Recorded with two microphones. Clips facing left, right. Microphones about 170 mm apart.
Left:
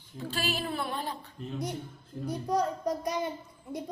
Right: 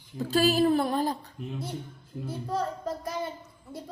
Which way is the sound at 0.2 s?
40° right (ahead or behind).